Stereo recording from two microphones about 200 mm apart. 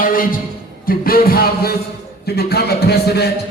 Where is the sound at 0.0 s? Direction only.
45° left (ahead or behind).